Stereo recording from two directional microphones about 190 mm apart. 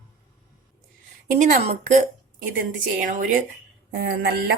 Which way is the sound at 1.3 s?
40° right (ahead or behind).